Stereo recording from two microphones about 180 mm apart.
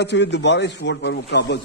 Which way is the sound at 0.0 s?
75° left (ahead or behind).